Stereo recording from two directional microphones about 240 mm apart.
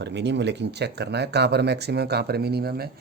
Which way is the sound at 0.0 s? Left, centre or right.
Right.